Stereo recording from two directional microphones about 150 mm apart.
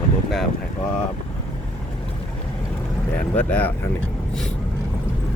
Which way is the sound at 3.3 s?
10° left (ahead or behind).